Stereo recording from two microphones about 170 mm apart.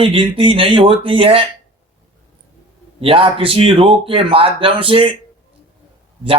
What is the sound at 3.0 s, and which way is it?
Speech, 35° right (ahead or behind).